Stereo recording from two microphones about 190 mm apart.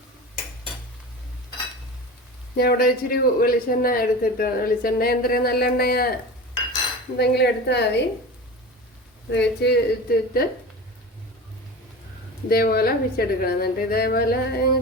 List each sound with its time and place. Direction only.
2.6 s speech: 50° left (ahead or behind)
7.2 s a woman's voice: 60° left (ahead or behind)
9.3 s a woman's voice: 65° left (ahead or behind)
12.5 s speech: 50° left (ahead or behind)